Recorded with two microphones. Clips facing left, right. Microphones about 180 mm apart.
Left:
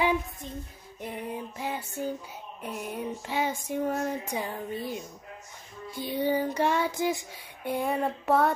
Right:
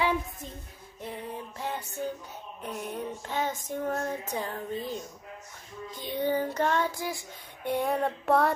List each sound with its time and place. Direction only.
1.0 s female singing: 10° left (ahead or behind)
2.6 s child singing: 10° left (ahead or behind)
6.9 s child singing: 20° left (ahead or behind)
7.6 s child singing: centre (ahead or behind)